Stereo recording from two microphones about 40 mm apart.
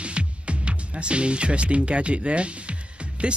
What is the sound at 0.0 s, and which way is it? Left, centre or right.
Speech, right.